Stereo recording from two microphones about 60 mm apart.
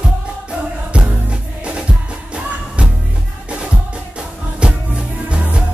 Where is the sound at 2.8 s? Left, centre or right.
Centre.